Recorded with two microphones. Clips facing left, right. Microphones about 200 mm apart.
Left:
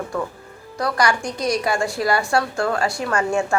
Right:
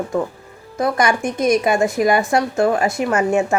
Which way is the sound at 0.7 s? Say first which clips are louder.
Right 3 dB; 20° right (ahead or behind).